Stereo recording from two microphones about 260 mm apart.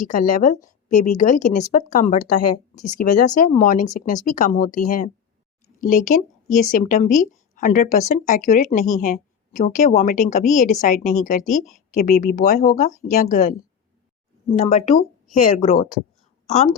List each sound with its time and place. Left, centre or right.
0.0 s speech: left
2.7 s speech: left
3.0 s a woman's voice: left